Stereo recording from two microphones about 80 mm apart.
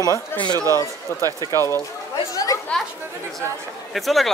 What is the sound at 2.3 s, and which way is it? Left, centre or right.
Speech, left.